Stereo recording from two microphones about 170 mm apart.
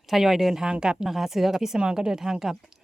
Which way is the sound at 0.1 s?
Centre (ahead or behind).